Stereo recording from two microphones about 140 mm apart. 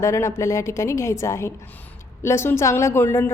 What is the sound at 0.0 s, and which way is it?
A woman's voice, 20° left (ahead or behind).